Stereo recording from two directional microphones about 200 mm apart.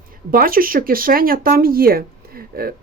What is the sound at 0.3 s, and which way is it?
Speech, 45° right (ahead or behind).